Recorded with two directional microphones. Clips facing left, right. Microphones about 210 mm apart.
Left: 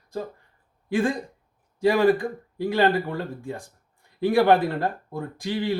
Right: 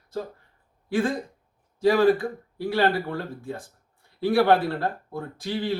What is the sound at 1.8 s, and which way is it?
Speech, 15° left (ahead or behind).